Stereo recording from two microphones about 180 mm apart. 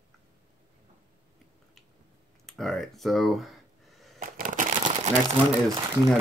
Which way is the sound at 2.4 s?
Centre (ahead or behind).